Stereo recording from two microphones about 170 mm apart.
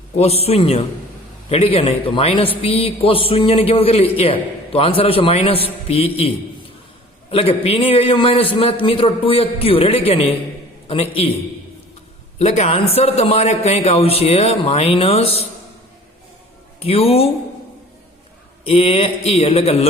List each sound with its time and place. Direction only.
0.2 s a man's voice: 35° left (ahead or behind)
12.4 s a man's voice: 40° left (ahead or behind)
16.8 s a man's voice: 35° left (ahead or behind)
18.6 s a man's voice: 35° left (ahead or behind)